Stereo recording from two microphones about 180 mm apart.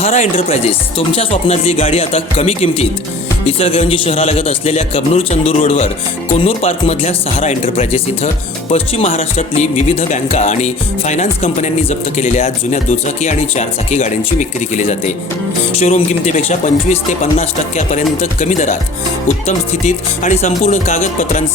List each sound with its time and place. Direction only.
0.0 s speech: 40° left (ahead or behind)